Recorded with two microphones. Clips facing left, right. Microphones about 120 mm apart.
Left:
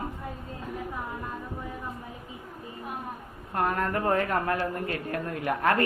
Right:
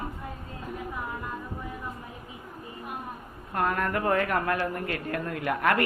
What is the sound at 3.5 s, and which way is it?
Speech, 25° left (ahead or behind).